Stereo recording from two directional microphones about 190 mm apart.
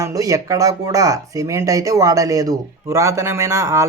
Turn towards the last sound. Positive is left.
turn(degrees=-15)  # may be behind; listen again after turning